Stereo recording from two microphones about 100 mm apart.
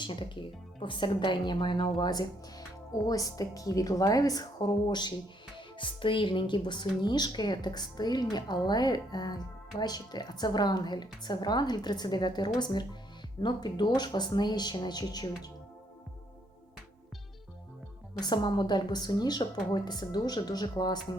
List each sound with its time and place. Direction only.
0.0 s a woman's voice: 50° left (ahead or behind)
18.2 s speech: 45° left (ahead or behind)